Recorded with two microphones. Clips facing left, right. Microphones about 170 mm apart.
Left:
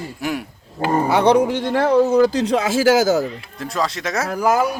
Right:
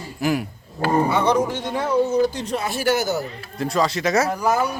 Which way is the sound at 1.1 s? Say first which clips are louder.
Left 4 dB; 70° left (ahead or behind).